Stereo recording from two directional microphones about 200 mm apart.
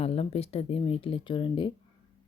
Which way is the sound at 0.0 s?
30° left (ahead or behind).